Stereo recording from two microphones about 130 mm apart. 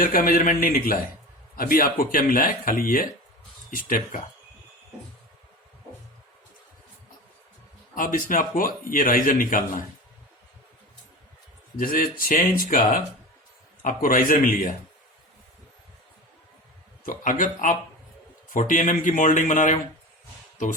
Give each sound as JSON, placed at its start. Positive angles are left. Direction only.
{"t": 0.0, "sound": "a man's voice", "side_deg": 90}
{"t": 7.9, "sound": "a man's voice", "side_deg": 90}
{"t": 11.8, "sound": "a man's voice", "side_deg": 90}
{"t": 13.8, "sound": "a man's voice", "side_deg": 90}
{"t": 17.1, "sound": "a man's voice", "side_deg": 90}